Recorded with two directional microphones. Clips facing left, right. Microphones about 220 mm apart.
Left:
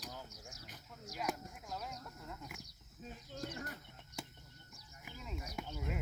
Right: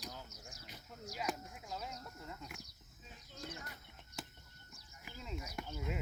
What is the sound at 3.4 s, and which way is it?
Speech, 45° left (ahead or behind).